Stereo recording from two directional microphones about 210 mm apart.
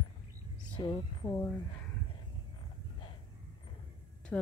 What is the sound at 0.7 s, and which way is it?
Speech, 20° left (ahead or behind).